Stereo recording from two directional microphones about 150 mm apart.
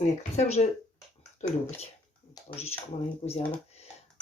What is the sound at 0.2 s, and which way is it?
Speech, 50° left (ahead or behind).